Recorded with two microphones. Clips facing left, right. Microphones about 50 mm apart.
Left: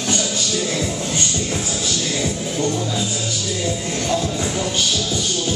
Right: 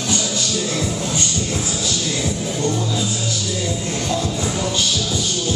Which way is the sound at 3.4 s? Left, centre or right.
Centre.